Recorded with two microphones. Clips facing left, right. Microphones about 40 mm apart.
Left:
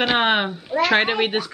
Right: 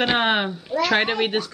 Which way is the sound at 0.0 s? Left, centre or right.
Centre.